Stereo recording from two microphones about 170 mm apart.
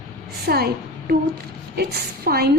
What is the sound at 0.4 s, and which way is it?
A woman's voice, 65° right (ahead or behind).